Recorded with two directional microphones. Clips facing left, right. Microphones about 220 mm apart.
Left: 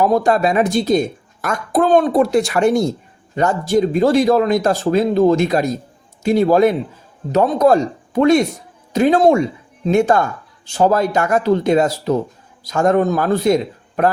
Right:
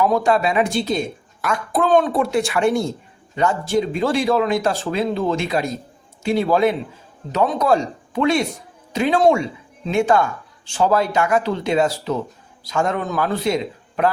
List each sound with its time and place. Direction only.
0.0 s a woman's voice: 40° left (ahead or behind)